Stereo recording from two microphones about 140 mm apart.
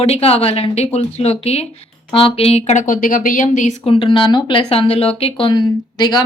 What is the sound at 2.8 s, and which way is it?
Speech, 75° left (ahead or behind).